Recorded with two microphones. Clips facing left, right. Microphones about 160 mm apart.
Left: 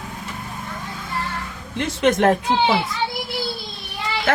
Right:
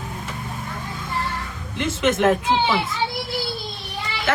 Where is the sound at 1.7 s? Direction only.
35° left (ahead or behind).